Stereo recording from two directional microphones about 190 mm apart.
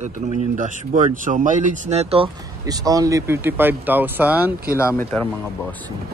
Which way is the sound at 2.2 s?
20° right (ahead or behind).